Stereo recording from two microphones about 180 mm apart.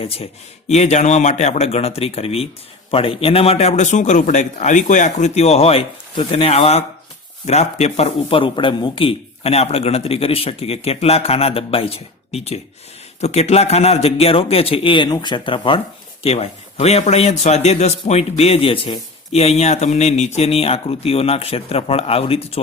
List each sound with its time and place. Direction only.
0.7 s a man's voice: 40° left (ahead or behind)